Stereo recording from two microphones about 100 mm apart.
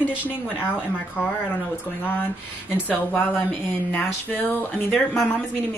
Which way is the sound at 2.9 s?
15° left (ahead or behind).